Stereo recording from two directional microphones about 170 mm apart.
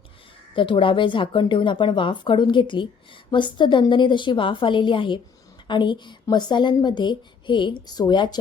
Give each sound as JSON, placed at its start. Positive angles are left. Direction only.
{"t": 0.5, "sound": "a woman's voice", "side_deg": 30}